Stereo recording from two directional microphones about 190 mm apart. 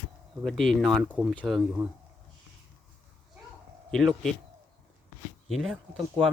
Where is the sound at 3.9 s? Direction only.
5° left (ahead or behind).